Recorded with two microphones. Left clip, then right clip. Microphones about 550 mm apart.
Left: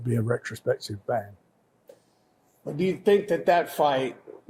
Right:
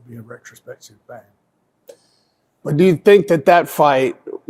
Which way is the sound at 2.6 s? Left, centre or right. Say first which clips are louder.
Right 12 dB; right.